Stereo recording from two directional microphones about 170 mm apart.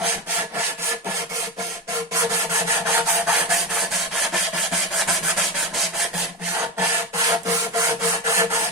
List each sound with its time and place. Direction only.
2.9 s rub: 5° right (ahead or behind)
7.3 s rub: 20° right (ahead or behind)